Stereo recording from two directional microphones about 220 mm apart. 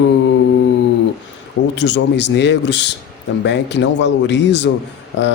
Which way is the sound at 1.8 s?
50° left (ahead or behind).